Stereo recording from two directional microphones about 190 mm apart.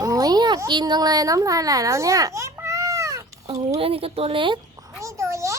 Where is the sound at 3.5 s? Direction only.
30° right (ahead or behind).